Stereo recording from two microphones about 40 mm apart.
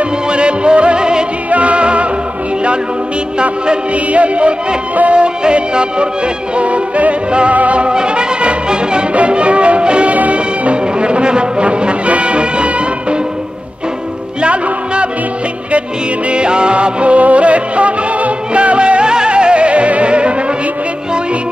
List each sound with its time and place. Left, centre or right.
0.0 s music: right
1.5 s music: right
3.6 s music: right
10.1 s music: right
14.4 s music: right
16.3 s music: right